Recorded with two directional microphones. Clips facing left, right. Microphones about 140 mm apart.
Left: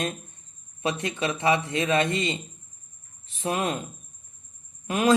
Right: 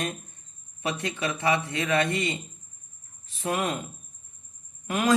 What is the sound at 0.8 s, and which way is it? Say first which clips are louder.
Speech: left 2 dB; 20° left (ahead or behind).